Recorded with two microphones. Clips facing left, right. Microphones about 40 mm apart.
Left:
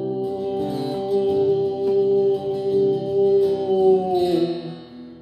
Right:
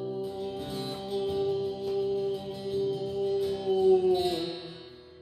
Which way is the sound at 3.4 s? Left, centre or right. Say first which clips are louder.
Left 10 dB; centre.